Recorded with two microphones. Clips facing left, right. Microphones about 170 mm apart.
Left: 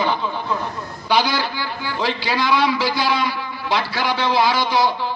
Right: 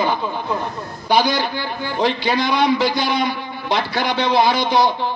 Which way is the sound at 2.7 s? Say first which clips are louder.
Right 2 dB; 55° right (ahead or behind).